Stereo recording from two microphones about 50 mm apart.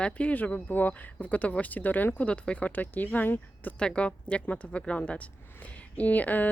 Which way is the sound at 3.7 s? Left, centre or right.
Left.